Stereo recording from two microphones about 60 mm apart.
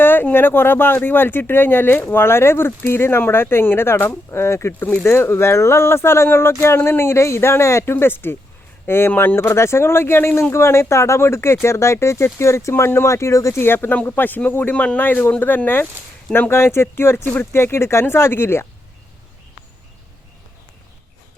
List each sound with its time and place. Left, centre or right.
0.0 s speech: left
5.0 s speech: left
13.6 s speech: left